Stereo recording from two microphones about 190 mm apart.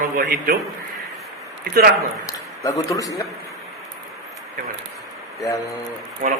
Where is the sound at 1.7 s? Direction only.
45° right (ahead or behind).